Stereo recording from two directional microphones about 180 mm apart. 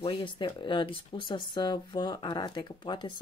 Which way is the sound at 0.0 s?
25° left (ahead or behind).